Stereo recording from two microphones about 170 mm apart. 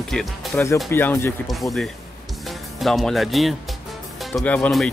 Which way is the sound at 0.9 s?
15° left (ahead or behind).